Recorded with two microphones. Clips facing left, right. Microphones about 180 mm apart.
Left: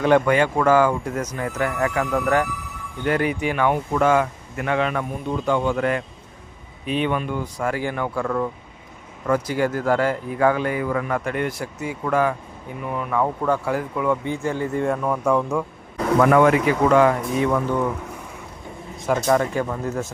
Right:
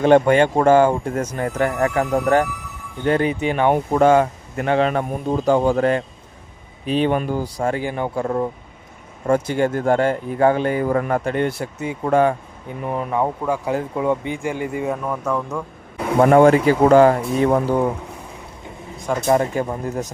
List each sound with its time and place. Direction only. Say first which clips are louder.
0.0 s speech: right 4 dB; 30° right (ahead or behind)
11.2 s speech: right 4 dB; 30° right (ahead or behind); by 14.9 s 10° right (ahead or behind)
15.0 s speech: left 3 dB; 5° left (ahead or behind)
16.1 s speech: right 4 dB; 30° right (ahead or behind)
19.3 s speech: right 4 dB; 20° right (ahead or behind)